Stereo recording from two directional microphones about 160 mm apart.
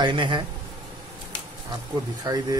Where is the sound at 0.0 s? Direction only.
30° right (ahead or behind).